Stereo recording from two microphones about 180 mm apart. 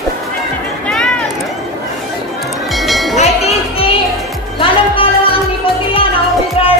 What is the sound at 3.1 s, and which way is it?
Music, 35° left (ahead or behind).